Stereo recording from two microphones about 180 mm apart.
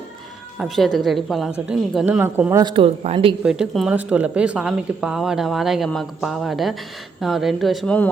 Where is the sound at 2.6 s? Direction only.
30° right (ahead or behind).